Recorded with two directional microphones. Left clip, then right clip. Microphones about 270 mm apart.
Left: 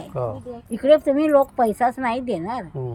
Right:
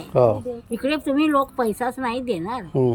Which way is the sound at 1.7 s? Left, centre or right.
Centre.